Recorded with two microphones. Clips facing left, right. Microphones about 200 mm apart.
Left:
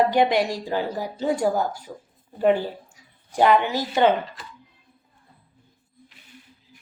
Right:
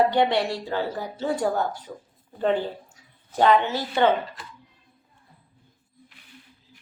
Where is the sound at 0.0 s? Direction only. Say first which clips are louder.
Left 1 dB; 10° left (ahead or behind).